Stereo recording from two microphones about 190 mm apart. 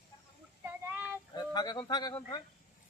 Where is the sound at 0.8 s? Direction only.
10° right (ahead or behind).